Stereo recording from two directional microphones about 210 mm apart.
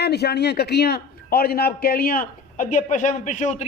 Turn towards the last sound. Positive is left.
turn(degrees=35)  # may be behind; listen again after turning